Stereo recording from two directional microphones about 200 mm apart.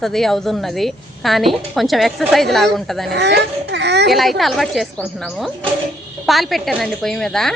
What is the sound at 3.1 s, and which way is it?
Speech, 60° right (ahead or behind).